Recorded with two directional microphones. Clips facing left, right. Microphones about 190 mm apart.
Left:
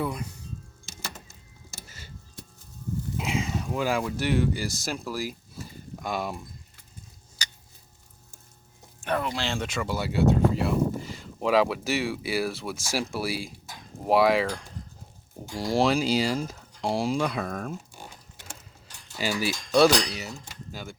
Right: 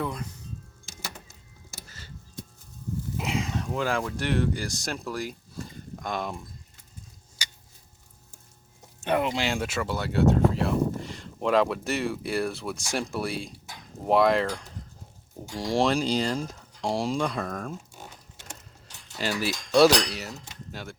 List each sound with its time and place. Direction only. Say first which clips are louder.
0.0 s speech: left 1 dB; 10° left (ahead or behind)
0.9 s music: even; 10° right (ahead or behind)
3.2 s speech: even; centre (ahead or behind)
9.0 s speech: right 3 dB; 20° right (ahead or behind)
9.5 s speech: right 1 dB; 5° right (ahead or behind)
19.2 s speech: left 1 dB; centre (ahead or behind)